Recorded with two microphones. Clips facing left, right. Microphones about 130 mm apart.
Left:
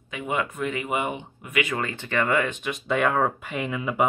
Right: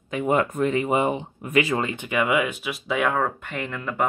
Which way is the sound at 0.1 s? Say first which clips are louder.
Right 6 dB; 40° right (ahead or behind).